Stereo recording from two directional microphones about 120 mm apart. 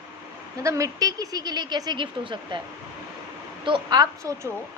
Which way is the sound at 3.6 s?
40° right (ahead or behind).